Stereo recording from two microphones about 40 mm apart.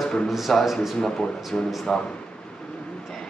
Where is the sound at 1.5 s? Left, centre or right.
Centre.